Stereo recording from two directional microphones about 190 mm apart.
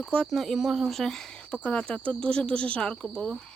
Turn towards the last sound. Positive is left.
turn(degrees=5)  # may be behind; listen again after turning